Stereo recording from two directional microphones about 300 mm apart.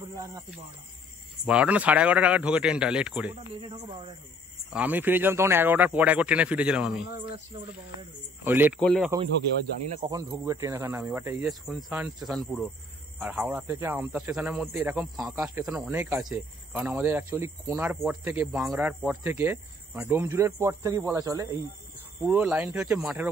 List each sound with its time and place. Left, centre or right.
1.4 s speech: centre
3.6 s speech: centre
4.7 s speech: centre
8.5 s speech: centre
9.9 s speech: centre